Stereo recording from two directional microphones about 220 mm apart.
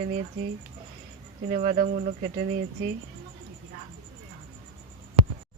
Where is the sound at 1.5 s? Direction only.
30° right (ahead or behind).